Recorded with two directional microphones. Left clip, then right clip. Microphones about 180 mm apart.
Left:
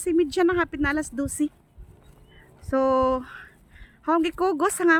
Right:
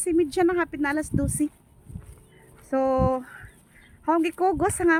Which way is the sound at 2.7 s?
10° left (ahead or behind).